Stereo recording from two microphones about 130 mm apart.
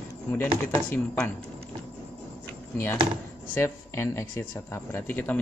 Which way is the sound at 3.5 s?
20° left (ahead or behind).